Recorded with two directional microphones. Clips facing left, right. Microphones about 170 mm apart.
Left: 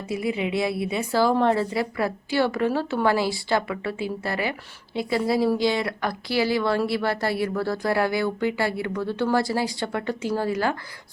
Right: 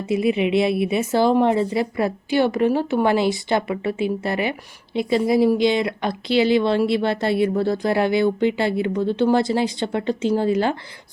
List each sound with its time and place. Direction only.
0.0 s speech: 25° right (ahead or behind)